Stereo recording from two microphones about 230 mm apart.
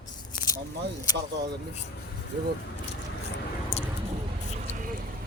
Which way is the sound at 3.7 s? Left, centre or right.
Left.